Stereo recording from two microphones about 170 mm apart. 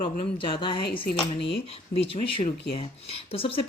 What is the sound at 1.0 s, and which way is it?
Speech, 90° left.